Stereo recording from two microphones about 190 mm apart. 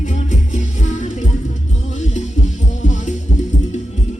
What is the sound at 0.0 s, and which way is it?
Music, 40° left (ahead or behind).